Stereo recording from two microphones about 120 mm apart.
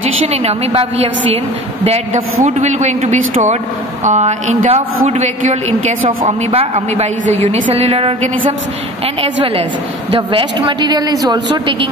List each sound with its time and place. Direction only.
0.3 s a man's voice: 60° right (ahead or behind)
2.4 s a woman's voice: 75° right (ahead or behind)
4.6 s a man's voice: 60° right (ahead or behind)
6.0 s a woman's voice: 50° right (ahead or behind)
6.7 s a woman's voice: 80° right; by 11.9 s 40° right (ahead or behind)